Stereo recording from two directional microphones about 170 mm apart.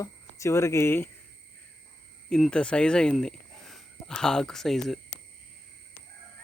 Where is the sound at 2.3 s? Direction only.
5° left (ahead or behind).